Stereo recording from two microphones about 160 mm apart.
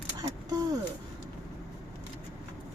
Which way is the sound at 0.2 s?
25° right (ahead or behind).